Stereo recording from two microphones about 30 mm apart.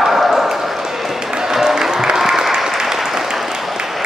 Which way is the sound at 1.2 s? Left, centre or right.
Centre.